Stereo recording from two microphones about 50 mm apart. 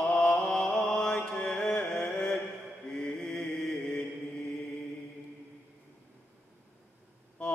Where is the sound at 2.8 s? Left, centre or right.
Centre.